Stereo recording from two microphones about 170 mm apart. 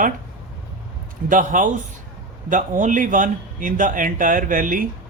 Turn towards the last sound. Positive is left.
turn(degrees=-55)  # may be behind; listen again after turning